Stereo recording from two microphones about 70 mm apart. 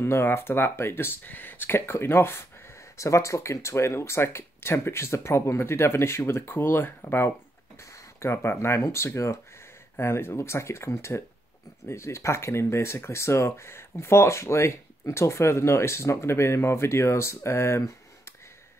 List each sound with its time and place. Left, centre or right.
0.0 s speech: left
7.8 s speech: left